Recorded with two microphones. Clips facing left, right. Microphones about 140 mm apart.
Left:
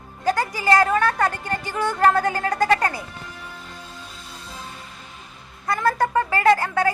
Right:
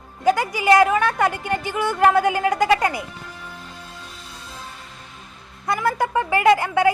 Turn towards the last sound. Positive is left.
turn(degrees=-15)  # may be behind; listen again after turning